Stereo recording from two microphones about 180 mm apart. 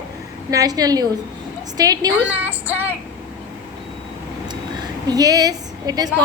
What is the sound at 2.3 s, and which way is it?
Speech, 10° right (ahead or behind).